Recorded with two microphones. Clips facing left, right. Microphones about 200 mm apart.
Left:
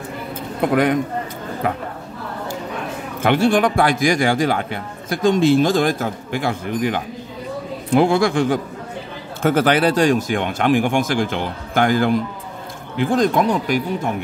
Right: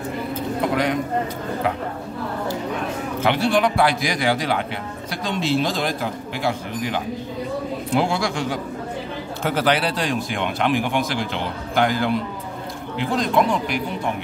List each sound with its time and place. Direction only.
3.2 s speech: 50° left (ahead or behind)